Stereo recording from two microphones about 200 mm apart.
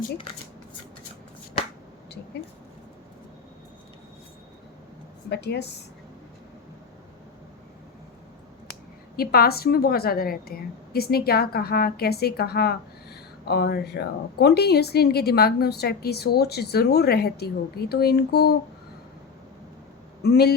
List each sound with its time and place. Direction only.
5.3 s speech: 55° left (ahead or behind)
9.1 s a woman's voice: 50° left (ahead or behind)
20.2 s a woman's voice: 55° left (ahead or behind)